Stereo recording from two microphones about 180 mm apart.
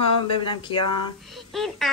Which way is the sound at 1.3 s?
Centre (ahead or behind).